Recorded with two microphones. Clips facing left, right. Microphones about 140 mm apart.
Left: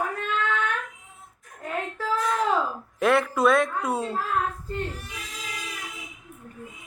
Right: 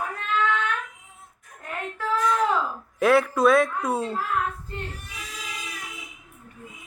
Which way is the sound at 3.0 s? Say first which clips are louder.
Right 2 dB; centre (ahead or behind).